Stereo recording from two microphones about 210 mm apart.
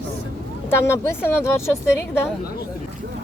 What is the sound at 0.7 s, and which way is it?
A woman's voice, 15° left (ahead or behind).